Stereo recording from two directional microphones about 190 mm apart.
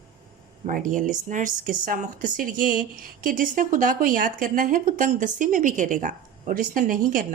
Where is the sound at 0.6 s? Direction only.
45° right (ahead or behind).